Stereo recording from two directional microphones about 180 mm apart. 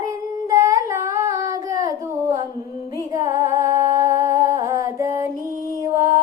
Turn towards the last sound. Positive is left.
turn(degrees=-20)  # may be behind; listen again after turning